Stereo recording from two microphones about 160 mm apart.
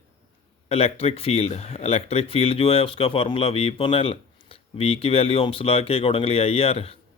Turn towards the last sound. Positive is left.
turn(degrees=40)  # may be behind; listen again after turning